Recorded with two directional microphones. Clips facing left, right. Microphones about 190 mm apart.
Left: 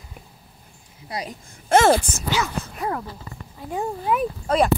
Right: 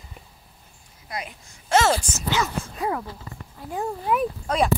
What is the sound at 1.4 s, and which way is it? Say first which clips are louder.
Speech: left 4 dB; 55° left (ahead or behind).